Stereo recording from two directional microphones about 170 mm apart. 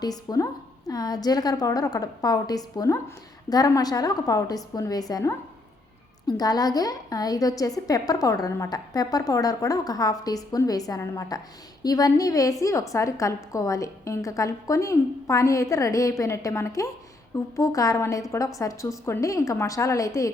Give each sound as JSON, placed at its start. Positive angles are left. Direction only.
{"t": 0.0, "sound": "a woman's voice", "side_deg": 25}